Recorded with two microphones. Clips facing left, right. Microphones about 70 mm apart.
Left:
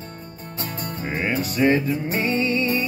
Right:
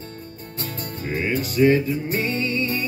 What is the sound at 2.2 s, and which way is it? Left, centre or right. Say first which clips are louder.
Music: left 3 dB; left.